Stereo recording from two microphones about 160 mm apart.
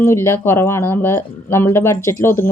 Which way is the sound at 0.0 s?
15° left (ahead or behind).